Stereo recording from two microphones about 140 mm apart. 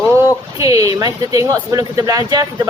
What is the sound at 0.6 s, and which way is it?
Speech, 25° right (ahead or behind).